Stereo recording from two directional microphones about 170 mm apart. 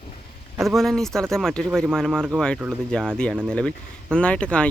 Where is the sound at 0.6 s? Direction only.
Centre (ahead or behind).